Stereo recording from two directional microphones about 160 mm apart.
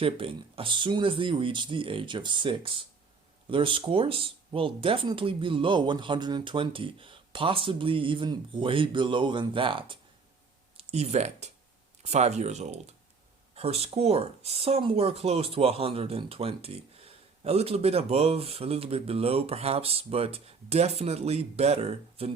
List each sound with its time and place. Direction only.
0.0 s speech: 35° right (ahead or behind)